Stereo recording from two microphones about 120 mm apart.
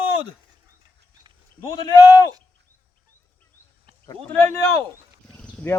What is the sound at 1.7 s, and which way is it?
Speech, 35° left (ahead or behind).